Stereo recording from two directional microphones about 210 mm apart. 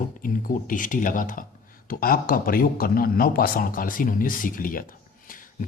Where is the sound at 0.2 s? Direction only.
40° left (ahead or behind).